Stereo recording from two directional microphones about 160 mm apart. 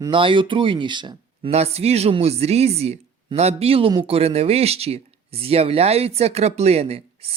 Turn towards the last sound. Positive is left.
turn(degrees=-40)  # may be behind; listen again after turning